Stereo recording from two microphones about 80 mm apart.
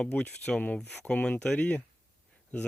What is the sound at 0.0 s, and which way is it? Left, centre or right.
Speech, centre.